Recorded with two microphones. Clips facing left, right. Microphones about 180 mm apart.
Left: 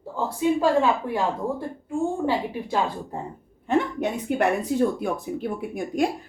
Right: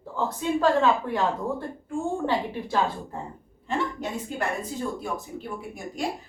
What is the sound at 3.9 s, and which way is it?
Speech, 65° left (ahead or behind).